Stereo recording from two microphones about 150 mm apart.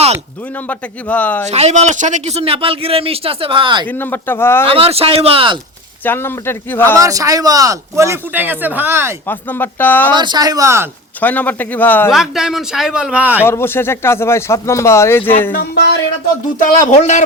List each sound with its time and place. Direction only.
0.7 s speech: 10° left (ahead or behind)
1.5 s speech: 45° right (ahead or behind)
3.8 s speech: 15° left (ahead or behind)
4.6 s speech: 40° right (ahead or behind)
6.1 s speech: 15° left (ahead or behind)
6.9 s speech: 20° right (ahead or behind)
9.2 s speech: 15° left (ahead or behind)
10.1 s speech: 30° right (ahead or behind)
11.2 s speech: 10° left (ahead or behind)
12.1 s speech: centre (ahead or behind)
13.4 s speech: 15° left (ahead or behind)
15.5 s music: 90° left
16.6 s speech: 65° left (ahead or behind)
16.9 s a man's voice: 55° left (ahead or behind)